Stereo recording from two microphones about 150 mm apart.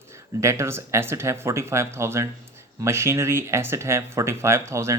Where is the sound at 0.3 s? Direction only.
20° right (ahead or behind).